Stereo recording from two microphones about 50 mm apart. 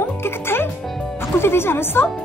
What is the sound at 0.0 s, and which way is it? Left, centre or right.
Music, left.